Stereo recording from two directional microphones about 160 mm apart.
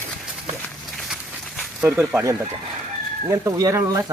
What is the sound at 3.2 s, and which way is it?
Speech, 20° right (ahead or behind).